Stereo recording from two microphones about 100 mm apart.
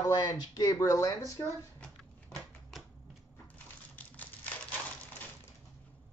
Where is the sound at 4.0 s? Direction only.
15° left (ahead or behind).